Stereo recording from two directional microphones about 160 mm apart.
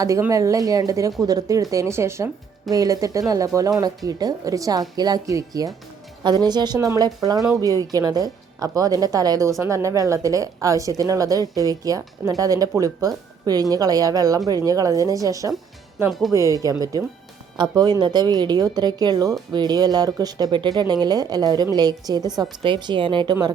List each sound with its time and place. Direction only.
0.0 s speech: 20° right (ahead or behind)